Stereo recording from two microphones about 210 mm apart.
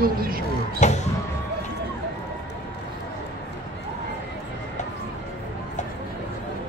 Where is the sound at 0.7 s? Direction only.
35° left (ahead or behind).